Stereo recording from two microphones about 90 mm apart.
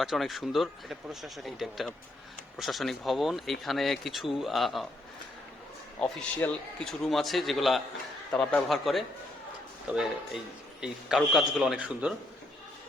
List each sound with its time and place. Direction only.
0.0 s speech: centre (ahead or behind)
6.0 s speech: 5° left (ahead or behind)
6.4 s speech: 20° left (ahead or behind)
6.8 s a man's voice: 5° left (ahead or behind)
8.7 s speech: centre (ahead or behind)